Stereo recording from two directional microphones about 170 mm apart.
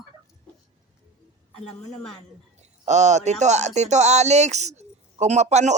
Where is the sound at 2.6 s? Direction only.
40° right (ahead or behind).